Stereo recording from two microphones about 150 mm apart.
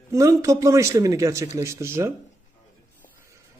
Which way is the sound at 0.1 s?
20° right (ahead or behind).